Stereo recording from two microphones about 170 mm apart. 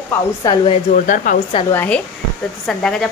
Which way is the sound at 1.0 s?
50° left (ahead or behind).